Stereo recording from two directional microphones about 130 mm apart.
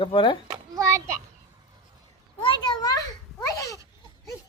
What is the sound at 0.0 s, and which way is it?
Speech, 40° left (ahead or behind).